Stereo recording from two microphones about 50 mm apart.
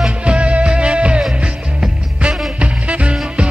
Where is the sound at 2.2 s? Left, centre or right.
Right.